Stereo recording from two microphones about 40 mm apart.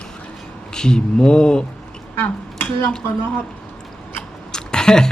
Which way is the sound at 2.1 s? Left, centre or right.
Left.